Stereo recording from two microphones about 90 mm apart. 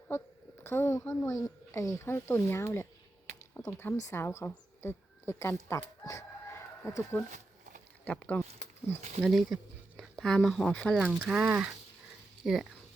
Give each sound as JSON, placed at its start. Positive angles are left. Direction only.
{"t": 0.1, "sound": "speech", "side_deg": 30}
{"t": 6.0, "sound": "chicken", "side_deg": 35}
{"t": 8.0, "sound": "speech", "side_deg": 15}
{"t": 9.2, "sound": "speech", "side_deg": 0}
{"t": 11.0, "sound": "speech", "side_deg": -5}
{"t": 11.4, "sound": "speech", "side_deg": -15}
{"t": 12.4, "sound": "speech", "side_deg": 0}